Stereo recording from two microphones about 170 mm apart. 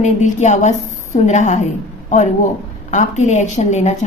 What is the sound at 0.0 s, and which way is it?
A woman's voice, 45° left (ahead or behind).